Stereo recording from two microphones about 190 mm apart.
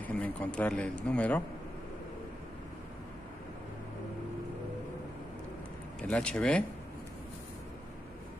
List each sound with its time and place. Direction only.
0.0 s speech: 5° left (ahead or behind)
5.9 s speech: 5° left (ahead or behind)